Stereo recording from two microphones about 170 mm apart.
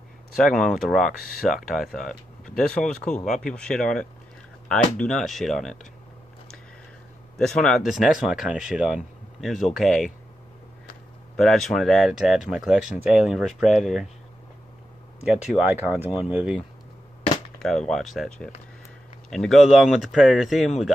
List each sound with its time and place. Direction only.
0.4 s speech: centre (ahead or behind)
7.3 s speech: 5° left (ahead or behind)
11.3 s speech: centre (ahead or behind)
15.2 s speech: 5° right (ahead or behind)
17.6 s speech: centre (ahead or behind)